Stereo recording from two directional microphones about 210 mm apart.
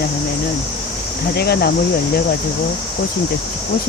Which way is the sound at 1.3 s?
50° left (ahead or behind).